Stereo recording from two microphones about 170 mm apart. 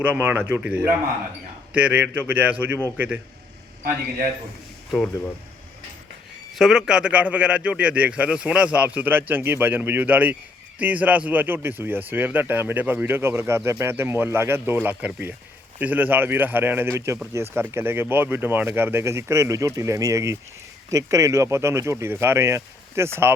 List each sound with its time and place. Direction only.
0.0 s speech: 10° right (ahead or behind)
6.6 s speech: 5° right (ahead or behind)